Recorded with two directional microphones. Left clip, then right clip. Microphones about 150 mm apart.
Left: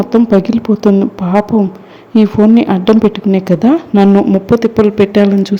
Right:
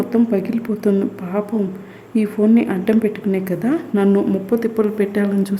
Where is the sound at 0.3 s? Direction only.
25° left (ahead or behind).